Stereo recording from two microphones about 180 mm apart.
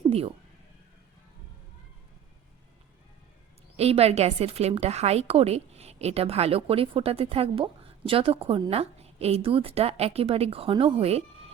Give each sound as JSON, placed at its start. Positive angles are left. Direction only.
{"t": 0.1, "sound": "speech", "side_deg": -35}
{"t": 3.8, "sound": "a woman's voice", "side_deg": -35}